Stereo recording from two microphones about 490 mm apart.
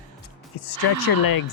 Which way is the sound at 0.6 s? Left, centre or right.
Left.